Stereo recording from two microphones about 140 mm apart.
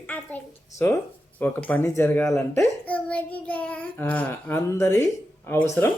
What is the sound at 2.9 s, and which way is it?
Child singing, 10° left (ahead or behind).